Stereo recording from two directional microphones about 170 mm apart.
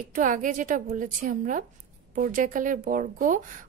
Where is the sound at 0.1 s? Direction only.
50° right (ahead or behind).